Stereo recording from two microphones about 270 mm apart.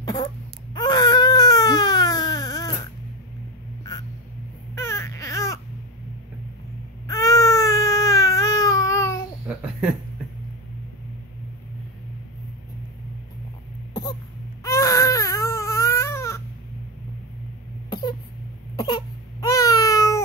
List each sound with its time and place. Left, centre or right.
0.0 s wail: centre
0.7 s baby cry: centre
4.7 s baby cry: centre
7.1 s baby cry: centre
14.6 s baby cry: centre
17.8 s wail: centre
18.8 s baby cry: centre